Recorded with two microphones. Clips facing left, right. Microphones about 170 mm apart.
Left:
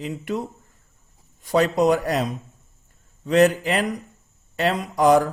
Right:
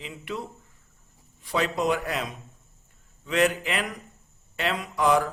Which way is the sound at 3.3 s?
40° left (ahead or behind).